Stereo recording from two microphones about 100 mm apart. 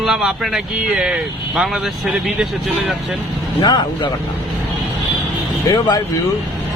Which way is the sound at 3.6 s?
50° left (ahead or behind).